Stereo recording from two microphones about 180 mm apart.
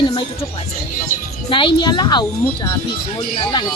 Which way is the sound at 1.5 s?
25° left (ahead or behind).